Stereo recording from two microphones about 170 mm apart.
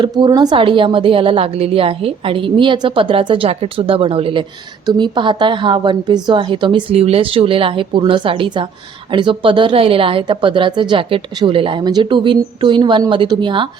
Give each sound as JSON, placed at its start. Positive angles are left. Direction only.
{"t": 0.0, "sound": "a woman's voice", "side_deg": -25}